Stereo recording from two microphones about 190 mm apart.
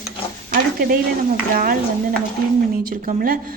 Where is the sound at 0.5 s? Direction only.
50° right (ahead or behind).